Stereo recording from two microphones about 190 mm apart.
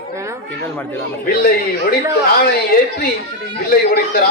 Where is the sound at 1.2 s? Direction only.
55° left (ahead or behind).